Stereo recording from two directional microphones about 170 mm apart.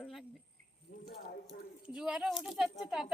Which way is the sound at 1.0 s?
65° left (ahead or behind).